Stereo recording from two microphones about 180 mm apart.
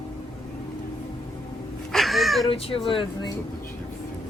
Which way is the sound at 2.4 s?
30° left (ahead or behind).